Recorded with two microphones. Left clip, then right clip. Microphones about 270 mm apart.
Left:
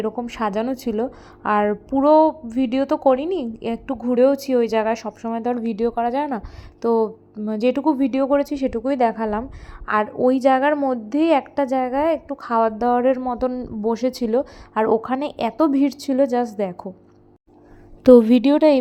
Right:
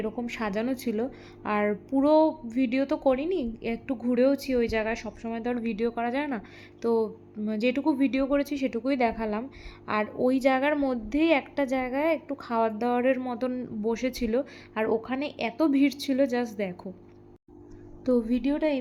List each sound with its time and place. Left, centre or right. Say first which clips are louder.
0.0 s a woman's voice: left 8 dB; centre
18.0 s a woman's voice: left 15 dB; left